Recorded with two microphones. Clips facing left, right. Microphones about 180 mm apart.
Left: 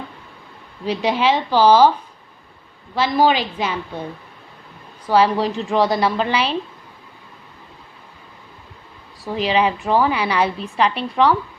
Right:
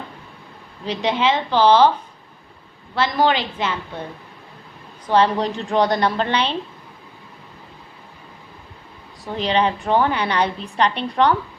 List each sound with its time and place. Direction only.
0.9 s a woman's voice: 10° left (ahead or behind)
2.9 s a woman's voice: 10° left (ahead or behind)
5.0 s a woman's voice: 10° left (ahead or behind)
9.2 s a woman's voice: 5° left (ahead or behind)